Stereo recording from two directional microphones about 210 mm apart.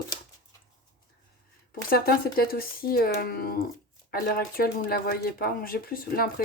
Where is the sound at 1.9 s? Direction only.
45° left (ahead or behind).